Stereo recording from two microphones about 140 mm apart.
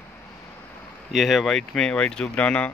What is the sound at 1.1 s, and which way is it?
Speech, centre (ahead or behind).